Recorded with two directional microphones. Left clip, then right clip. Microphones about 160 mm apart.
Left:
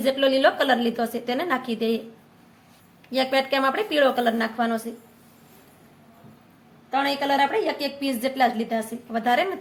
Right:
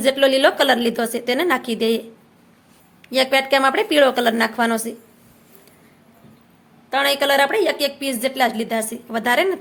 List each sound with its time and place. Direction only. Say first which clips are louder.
0.0 s a woman's voice: right 4 dB; 35° right (ahead or behind)
3.1 s a woman's voice: right 6 dB; 40° right (ahead or behind)
6.9 s a woman's voice: right 5 dB; 55° right (ahead or behind); by 9.6 s 35° right (ahead or behind)